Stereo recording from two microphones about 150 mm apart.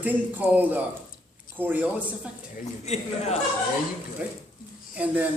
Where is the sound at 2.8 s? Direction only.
45° left (ahead or behind).